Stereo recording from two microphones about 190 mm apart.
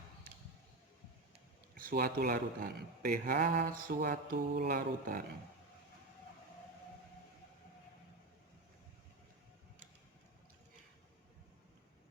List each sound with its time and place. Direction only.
1.7 s speech: 50° right (ahead or behind)